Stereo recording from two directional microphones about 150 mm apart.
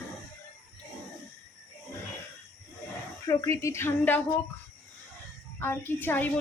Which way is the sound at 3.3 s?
20° left (ahead or behind).